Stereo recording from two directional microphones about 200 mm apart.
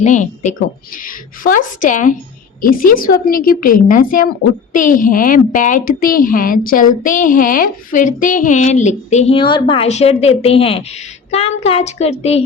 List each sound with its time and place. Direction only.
0.0 s a woman's voice: 40° left (ahead or behind)